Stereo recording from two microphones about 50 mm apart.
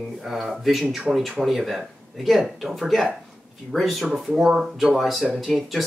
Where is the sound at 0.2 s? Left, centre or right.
Centre.